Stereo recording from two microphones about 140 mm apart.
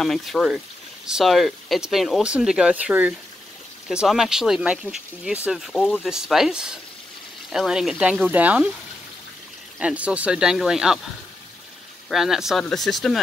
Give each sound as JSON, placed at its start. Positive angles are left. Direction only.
{"t": 0.0, "sound": "speech", "side_deg": 0}
{"t": 9.8, "sound": "speech", "side_deg": -10}
{"t": 12.1, "sound": "speech", "side_deg": 0}